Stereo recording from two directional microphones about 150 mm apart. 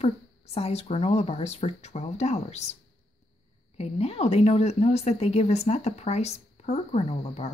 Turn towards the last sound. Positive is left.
turn(degrees=45)  # may be behind; listen again after turning